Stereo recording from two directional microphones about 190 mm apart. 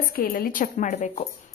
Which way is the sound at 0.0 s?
50° left (ahead or behind).